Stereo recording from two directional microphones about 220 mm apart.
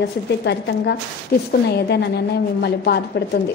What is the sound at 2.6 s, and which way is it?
Speech, 50° left (ahead or behind).